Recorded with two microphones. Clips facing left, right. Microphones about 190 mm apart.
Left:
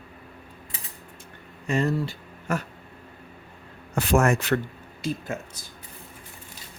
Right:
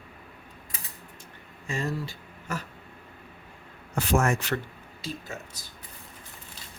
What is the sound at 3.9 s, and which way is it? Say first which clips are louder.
Speech: left 4 dB; 65° left (ahead or behind).